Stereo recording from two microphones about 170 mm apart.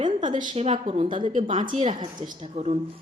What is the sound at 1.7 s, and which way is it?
Speech, 45° right (ahead or behind).